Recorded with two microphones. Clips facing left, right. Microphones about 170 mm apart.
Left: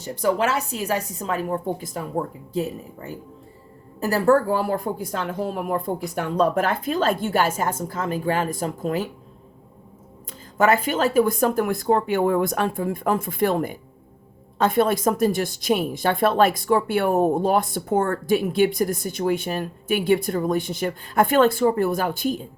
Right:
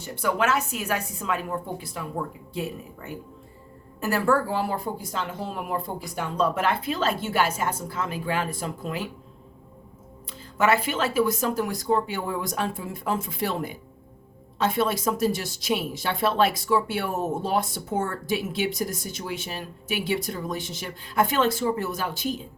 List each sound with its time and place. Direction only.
0.0 s a woman's voice: 35° left (ahead or behind)
10.6 s speech: 40° left (ahead or behind)